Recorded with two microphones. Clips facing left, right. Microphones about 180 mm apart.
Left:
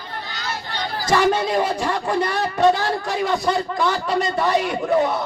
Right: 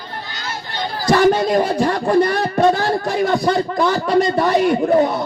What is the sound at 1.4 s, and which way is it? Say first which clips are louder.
Speech: right 5 dB; 45° right (ahead or behind).